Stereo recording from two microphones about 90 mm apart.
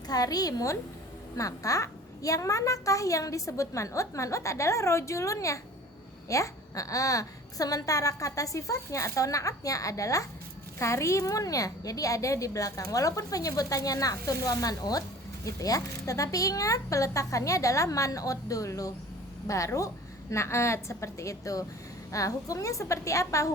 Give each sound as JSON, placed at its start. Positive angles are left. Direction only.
{"t": 0.1, "sound": "a woman's voice", "side_deg": 45}